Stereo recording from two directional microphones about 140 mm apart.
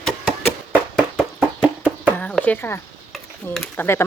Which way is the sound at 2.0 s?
10° left (ahead or behind).